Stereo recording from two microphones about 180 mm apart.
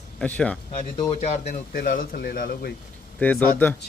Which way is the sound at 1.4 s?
55° left (ahead or behind).